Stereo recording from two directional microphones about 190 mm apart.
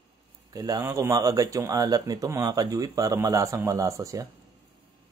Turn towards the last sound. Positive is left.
turn(degrees=-15)  # may be behind; listen again after turning